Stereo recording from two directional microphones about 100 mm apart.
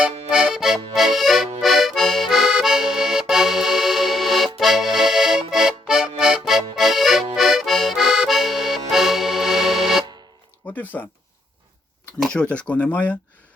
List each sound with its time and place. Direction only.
0.0 s accordion: 10° right (ahead or behind)
10.6 s a sound: 15° left (ahead or behind)
12.3 s speech: 10° left (ahead or behind)